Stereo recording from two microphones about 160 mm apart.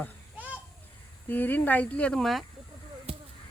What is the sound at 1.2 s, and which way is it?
Speech, 10° left (ahead or behind).